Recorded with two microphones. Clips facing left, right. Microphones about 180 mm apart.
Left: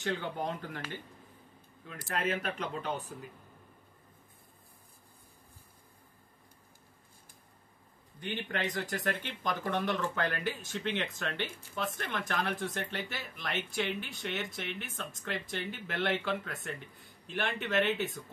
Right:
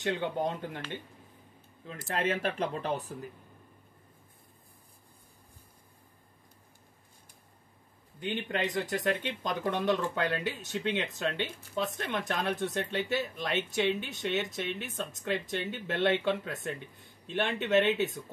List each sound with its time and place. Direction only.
0.2 s speech: 20° right (ahead or behind)
1.9 s speech: 25° right (ahead or behind)
8.2 s speech: 20° right (ahead or behind)